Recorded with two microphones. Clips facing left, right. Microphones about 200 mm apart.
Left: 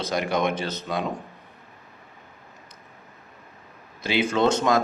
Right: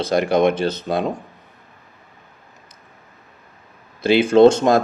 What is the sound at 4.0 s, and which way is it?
Speech, 30° right (ahead or behind).